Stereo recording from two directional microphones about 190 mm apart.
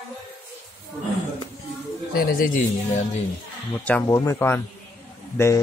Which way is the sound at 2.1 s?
50° left (ahead or behind).